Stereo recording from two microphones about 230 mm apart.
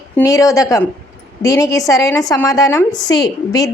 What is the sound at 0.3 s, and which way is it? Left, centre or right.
Speech, centre.